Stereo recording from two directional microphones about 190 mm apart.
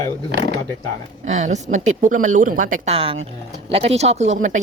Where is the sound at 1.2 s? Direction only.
40° right (ahead or behind).